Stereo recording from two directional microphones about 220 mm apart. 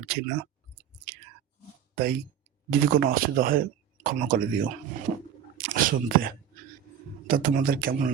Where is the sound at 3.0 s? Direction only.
40° right (ahead or behind).